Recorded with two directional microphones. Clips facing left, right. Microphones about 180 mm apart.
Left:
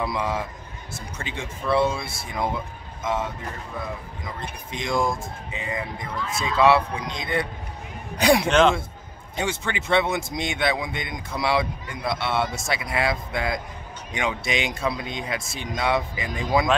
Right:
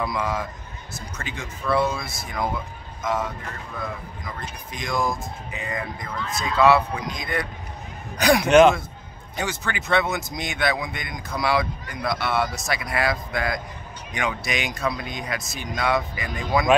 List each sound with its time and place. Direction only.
0.0 s speech: 25° left (ahead or behind)
4.4 s speech: 25° left (ahead or behind)
8.5 s a man's voice: 10° right (ahead or behind)
9.4 s speech: 25° left (ahead or behind)